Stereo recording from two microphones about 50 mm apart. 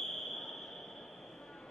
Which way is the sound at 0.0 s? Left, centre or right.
Centre.